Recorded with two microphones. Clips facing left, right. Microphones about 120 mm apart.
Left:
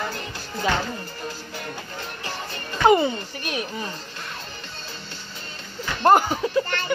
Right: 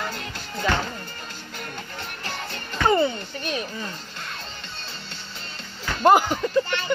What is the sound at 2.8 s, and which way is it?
Music, 20° left (ahead or behind).